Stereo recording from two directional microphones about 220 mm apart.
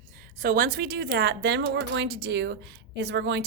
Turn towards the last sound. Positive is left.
turn(degrees=-50)  # may be behind; listen again after turning